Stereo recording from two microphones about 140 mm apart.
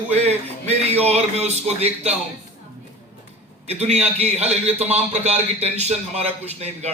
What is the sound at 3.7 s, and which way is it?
A man's voice, 50° right (ahead or behind).